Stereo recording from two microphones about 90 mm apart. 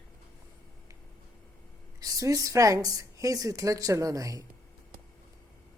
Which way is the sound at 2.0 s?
40° right (ahead or behind).